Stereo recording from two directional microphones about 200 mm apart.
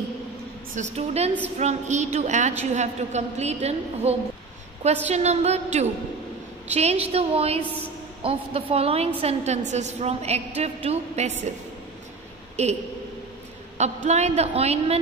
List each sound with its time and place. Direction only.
0.7 s a woman's voice: 30° right (ahead or behind)
12.6 s a woman's voice: 30° right (ahead or behind)
13.7 s a woman's voice: 35° right (ahead or behind)